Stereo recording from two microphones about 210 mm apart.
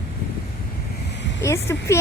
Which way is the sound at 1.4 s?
15° left (ahead or behind).